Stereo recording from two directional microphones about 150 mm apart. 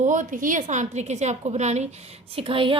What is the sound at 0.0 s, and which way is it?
A woman's voice, 55° right (ahead or behind).